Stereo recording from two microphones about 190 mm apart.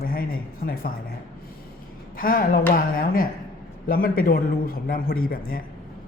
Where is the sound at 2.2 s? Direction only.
50° left (ahead or behind).